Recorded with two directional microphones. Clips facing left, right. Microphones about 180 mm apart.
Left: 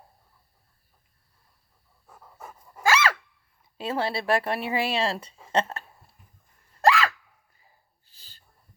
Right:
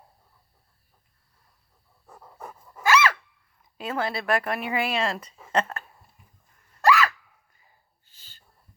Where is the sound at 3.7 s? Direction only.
30° left (ahead or behind).